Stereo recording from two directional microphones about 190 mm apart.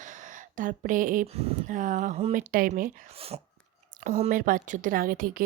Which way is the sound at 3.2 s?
30° right (ahead or behind).